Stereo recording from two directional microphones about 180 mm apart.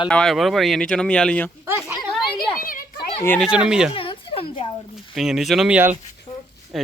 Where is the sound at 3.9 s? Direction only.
30° left (ahead or behind).